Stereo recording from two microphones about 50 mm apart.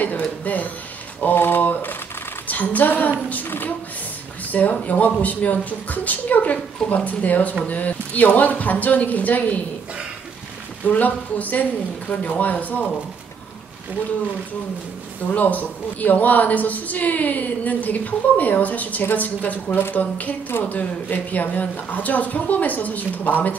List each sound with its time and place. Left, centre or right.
0.5 s speech: left
1.2 s a sound: left
2.4 s a woman's voice: left
3.4 s a sound: left
4.5 s speech: left
10.9 s speech: left
15.3 s speech: left